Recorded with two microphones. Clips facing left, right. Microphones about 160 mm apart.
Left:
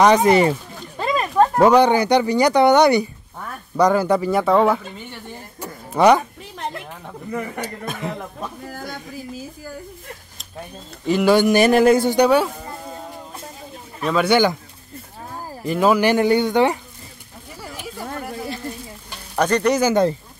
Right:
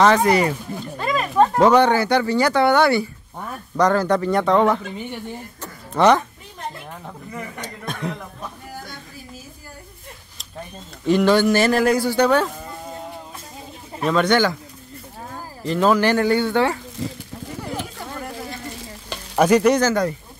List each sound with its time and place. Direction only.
0.0 s speech: 20° left (ahead or behind)
0.9 s a sound: 25° left (ahead or behind)
1.3 s speech: 10° left (ahead or behind)
5.6 s a sound: 10° left (ahead or behind)
7.6 s speech: 5° left (ahead or behind)
11.1 s speech: 5° left (ahead or behind)
11.3 s speech: 15° left (ahead or behind)
14.0 s speech: 5° left (ahead or behind)
15.6 s speech: 10° left (ahead or behind)
17.0 s speech: 90° right
19.3 s sizzle: 5° right (ahead or behind)
19.8 s speech: 20° left (ahead or behind)